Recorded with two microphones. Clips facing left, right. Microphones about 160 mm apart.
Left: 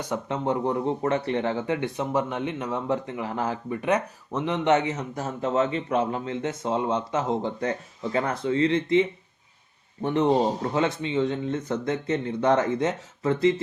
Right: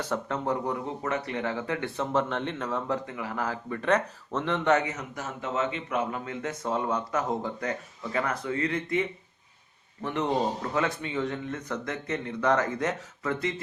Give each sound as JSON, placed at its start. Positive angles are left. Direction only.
{"t": 0.0, "sound": "speech", "side_deg": 15}